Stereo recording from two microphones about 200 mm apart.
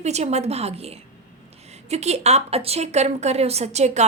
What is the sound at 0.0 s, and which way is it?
A woman's voice, 35° right (ahead or behind).